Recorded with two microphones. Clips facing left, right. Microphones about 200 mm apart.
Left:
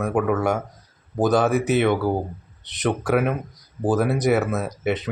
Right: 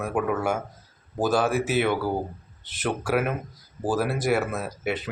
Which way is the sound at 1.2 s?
20° left (ahead or behind).